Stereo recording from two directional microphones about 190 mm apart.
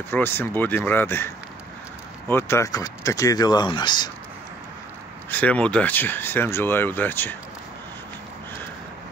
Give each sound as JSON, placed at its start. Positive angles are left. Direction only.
{"t": 0.1, "sound": "speech", "side_deg": 10}
{"t": 5.3, "sound": "speech", "side_deg": 5}